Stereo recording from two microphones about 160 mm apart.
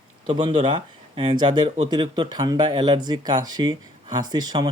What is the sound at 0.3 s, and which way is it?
Speech, 30° right (ahead or behind).